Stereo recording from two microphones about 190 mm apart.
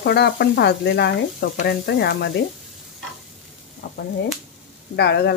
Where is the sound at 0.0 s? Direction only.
60° left (ahead or behind).